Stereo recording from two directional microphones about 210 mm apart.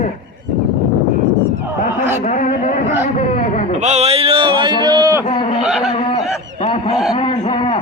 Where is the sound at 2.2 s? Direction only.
35° left (ahead or behind).